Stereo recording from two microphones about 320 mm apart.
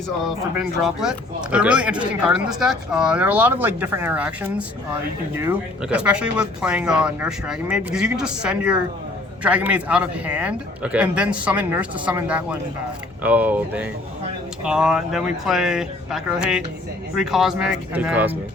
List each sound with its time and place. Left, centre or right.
0.3 s speech: centre